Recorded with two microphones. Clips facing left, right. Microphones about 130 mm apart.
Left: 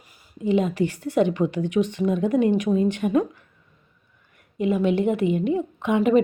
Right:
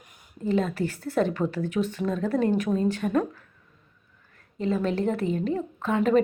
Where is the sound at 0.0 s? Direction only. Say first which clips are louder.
Left 3 dB; 5° left (ahead or behind).